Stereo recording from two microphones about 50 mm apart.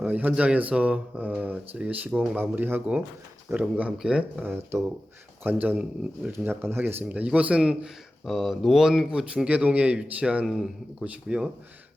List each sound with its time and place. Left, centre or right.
0.0 s speech: right
3.5 s speech: right
3.9 s speech: centre
4.4 s speech: right
5.4 s speech: right
7.0 s speech: right
8.2 s speech: centre
9.0 s speech: centre
9.5 s speech: right
10.4 s speech: centre
11.0 s speech: centre